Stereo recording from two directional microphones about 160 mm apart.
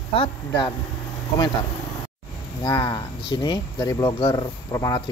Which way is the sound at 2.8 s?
30° left (ahead or behind).